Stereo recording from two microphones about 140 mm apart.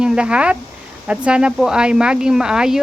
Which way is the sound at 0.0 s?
5° right (ahead or behind).